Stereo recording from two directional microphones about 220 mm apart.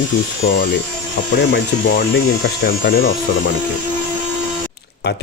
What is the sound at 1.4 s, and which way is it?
Speech, 50° left (ahead or behind).